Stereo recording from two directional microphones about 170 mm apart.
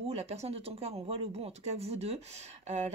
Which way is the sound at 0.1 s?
40° right (ahead or behind).